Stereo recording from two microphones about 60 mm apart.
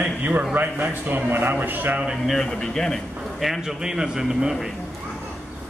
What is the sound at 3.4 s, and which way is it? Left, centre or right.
A man's voice, centre.